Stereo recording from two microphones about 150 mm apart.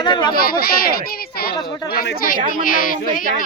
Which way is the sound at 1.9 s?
80° left.